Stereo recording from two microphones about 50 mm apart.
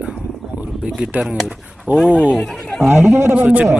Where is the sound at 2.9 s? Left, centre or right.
Right.